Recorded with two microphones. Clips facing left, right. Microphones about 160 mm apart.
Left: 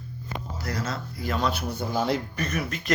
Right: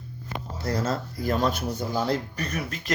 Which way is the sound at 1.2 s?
45° right (ahead or behind).